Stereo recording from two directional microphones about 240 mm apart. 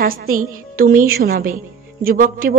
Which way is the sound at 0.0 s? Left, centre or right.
Right.